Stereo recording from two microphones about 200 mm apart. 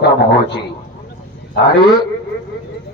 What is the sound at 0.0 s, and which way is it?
Speech, 60° left (ahead or behind).